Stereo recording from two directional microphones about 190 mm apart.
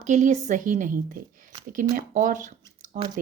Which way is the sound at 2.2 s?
40° right (ahead or behind).